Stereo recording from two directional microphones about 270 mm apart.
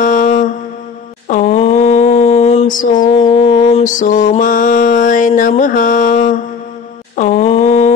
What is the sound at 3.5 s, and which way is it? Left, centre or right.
Mantra, left.